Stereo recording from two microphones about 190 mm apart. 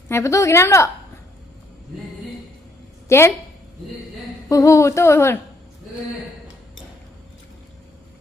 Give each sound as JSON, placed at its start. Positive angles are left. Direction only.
{"t": 0.1, "sound": "a woman's voice", "side_deg": 15}
{"t": 3.1, "sound": "a woman's voice", "side_deg": 15}
{"t": 4.4, "sound": "a woman's voice", "side_deg": 15}